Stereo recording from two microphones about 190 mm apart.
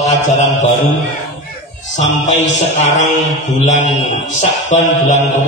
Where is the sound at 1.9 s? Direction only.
40° left (ahead or behind).